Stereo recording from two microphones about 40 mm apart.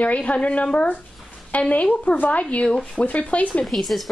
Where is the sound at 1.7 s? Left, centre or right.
Left.